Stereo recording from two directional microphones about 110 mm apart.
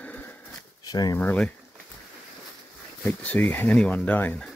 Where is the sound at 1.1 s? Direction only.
20° left (ahead or behind).